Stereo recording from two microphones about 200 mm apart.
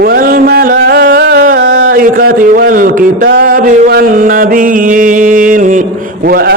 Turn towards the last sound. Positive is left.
turn(degrees=-50)  # may be behind; listen again after turning